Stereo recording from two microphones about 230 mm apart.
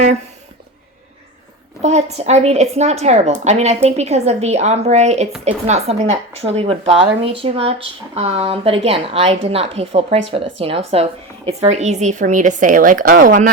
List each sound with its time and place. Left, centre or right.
1.8 s a woman's voice: right